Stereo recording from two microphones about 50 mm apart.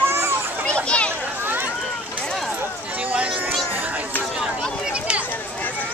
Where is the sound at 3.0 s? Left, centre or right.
Right.